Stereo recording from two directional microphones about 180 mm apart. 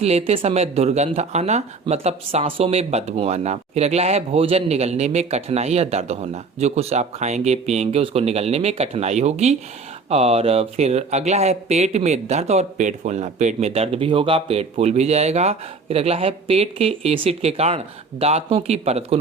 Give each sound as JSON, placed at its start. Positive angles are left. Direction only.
{"t": 0.0, "sound": "speech", "side_deg": -35}